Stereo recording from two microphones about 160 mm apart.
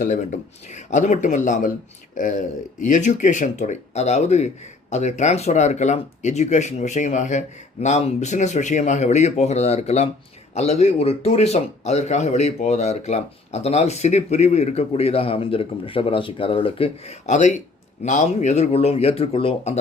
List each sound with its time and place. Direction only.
0.0 s speech: 50° left (ahead or behind)